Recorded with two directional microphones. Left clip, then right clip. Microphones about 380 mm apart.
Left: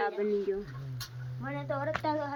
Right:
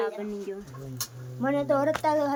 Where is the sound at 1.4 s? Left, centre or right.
Right.